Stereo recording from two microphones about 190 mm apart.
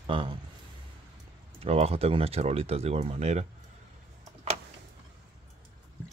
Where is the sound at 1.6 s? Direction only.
30° right (ahead or behind).